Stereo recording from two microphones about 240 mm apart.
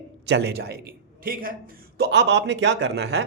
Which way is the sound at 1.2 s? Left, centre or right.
Right.